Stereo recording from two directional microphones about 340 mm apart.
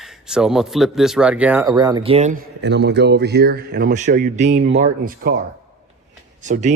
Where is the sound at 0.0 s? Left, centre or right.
Centre; by 5.4 s right.